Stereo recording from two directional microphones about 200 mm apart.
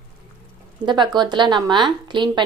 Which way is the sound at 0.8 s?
20° right (ahead or behind).